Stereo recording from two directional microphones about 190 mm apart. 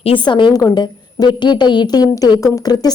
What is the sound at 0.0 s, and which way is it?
A woman's voice, 25° left (ahead or behind).